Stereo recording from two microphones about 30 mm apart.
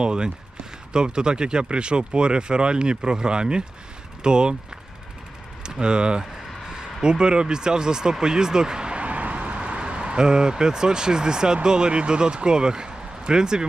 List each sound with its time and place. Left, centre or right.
0.0 s speech: right
5.6 s speech: right
9.0 s speech: right